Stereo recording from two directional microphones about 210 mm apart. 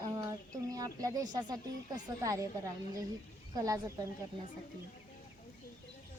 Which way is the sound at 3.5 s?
15° right (ahead or behind).